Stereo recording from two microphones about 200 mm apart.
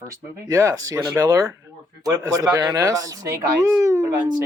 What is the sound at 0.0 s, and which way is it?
A man's voice, 15° right (ahead or behind).